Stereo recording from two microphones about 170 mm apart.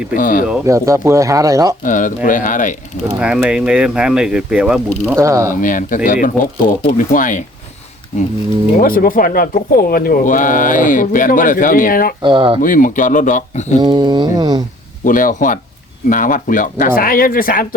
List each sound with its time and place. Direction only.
0.1 s speech: 55° left (ahead or behind)
0.6 s speech: 15° right (ahead or behind)
1.8 s speech: 50° left (ahead or behind)
3.2 s speech: 5° right (ahead or behind)
5.1 s speech: 15° right (ahead or behind)
5.6 s speech: 50° left (ahead or behind)
8.8 s speech: 55° left (ahead or behind)
12.2 s speech: 30° right (ahead or behind)
12.6 s speech: 50° left (ahead or behind)
13.7 s speech: 25° right (ahead or behind)
15.0 s speech: 50° left (ahead or behind)